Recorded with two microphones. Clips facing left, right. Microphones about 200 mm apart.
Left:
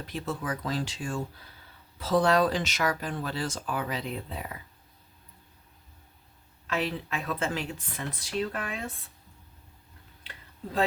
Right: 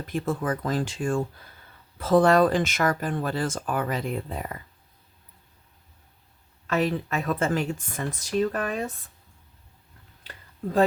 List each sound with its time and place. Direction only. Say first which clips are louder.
0.0 s speech: right 6 dB; 50° right (ahead or behind)
6.7 s speech: right 6 dB; 45° right (ahead or behind)